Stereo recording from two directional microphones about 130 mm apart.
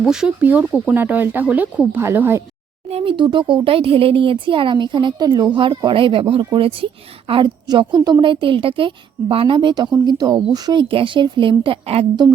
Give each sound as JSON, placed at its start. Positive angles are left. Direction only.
{"t": 0.0, "sound": "speech", "side_deg": -5}
{"t": 2.9, "sound": "speech", "side_deg": -40}